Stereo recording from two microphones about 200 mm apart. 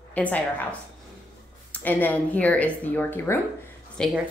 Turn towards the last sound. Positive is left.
turn(degrees=5)  # may be behind; listen again after turning